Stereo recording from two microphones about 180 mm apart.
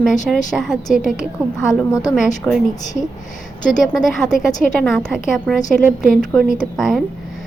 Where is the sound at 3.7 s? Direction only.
Centre (ahead or behind).